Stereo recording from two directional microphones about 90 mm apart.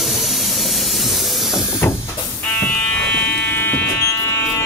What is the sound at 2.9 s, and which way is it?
Fire alarm, 20° left (ahead or behind).